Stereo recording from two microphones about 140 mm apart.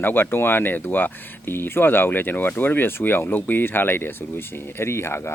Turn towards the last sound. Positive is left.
turn(degrees=20)  # may be behind; listen again after turning